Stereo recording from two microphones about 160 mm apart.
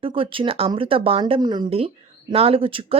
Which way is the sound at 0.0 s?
35° right (ahead or behind).